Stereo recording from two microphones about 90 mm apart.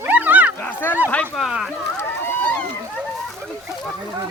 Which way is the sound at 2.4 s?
15° left (ahead or behind).